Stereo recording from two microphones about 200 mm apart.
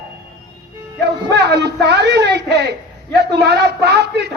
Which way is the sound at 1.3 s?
60° right (ahead or behind).